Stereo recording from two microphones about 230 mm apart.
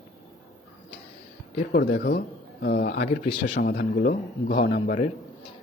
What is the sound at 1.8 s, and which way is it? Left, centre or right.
A man's voice, left.